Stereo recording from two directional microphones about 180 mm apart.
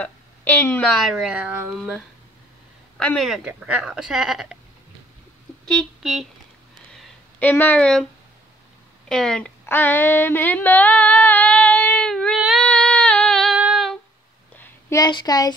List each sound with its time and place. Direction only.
0.0 s speech: 10° left (ahead or behind)
3.0 s speech: 5° left (ahead or behind)
5.7 s speech: centre (ahead or behind)
7.0 s a sound: 10° left (ahead or behind)
9.1 s a sound: 5° left (ahead or behind)
12.6 s female singing: 5° left (ahead or behind)
14.6 s a woman's voice: 15° left (ahead or behind)